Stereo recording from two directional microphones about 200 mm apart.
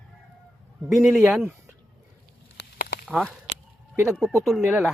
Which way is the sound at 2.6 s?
50° left (ahead or behind).